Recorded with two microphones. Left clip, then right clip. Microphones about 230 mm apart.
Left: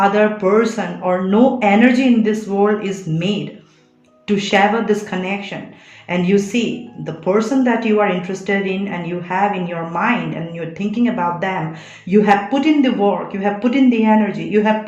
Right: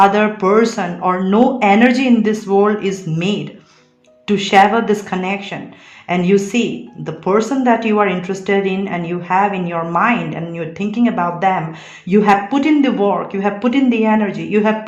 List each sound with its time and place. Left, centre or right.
0.1 s speech: right